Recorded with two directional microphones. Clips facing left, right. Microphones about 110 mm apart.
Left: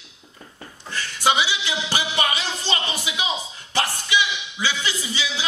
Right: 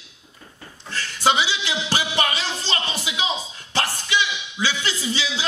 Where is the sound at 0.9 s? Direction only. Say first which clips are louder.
Right 1 dB; 15° left (ahead or behind).